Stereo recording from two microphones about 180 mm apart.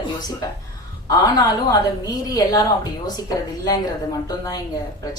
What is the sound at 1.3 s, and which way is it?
A woman's voice, 20° left (ahead or behind).